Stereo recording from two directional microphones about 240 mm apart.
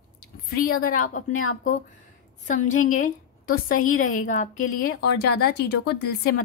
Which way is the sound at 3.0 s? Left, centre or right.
Left.